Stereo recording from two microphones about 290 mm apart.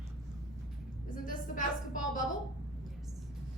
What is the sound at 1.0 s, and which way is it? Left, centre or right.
A woman's voice, left.